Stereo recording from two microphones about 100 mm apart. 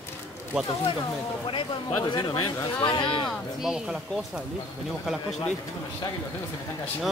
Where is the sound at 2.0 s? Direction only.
55° left (ahead or behind).